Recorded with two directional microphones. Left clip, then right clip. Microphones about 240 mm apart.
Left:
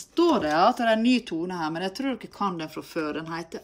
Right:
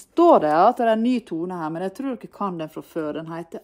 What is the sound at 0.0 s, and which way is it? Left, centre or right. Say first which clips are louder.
Speech: right 8 dB; centre.